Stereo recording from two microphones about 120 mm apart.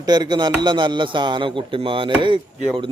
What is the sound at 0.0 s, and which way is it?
Speech, 35° right (ahead or behind).